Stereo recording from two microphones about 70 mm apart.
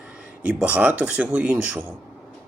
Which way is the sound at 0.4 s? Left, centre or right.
Right.